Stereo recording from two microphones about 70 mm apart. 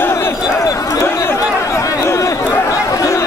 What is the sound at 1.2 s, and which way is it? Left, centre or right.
Chatter, left.